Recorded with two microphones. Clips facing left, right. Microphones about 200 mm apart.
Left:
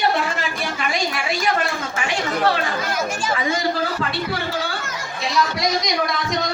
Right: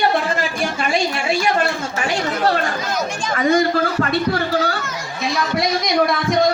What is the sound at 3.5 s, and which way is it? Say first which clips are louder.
Speech: right 9 dB; 50° right (ahead or behind).